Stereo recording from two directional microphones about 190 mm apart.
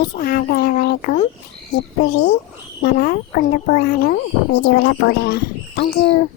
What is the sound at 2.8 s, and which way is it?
Speech, 50° left (ahead or behind).